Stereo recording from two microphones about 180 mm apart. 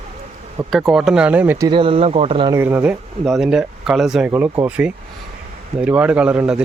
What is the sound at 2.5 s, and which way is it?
Speech, 15° right (ahead or behind).